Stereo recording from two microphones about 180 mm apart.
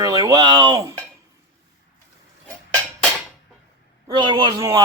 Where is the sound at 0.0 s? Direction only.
20° right (ahead or behind).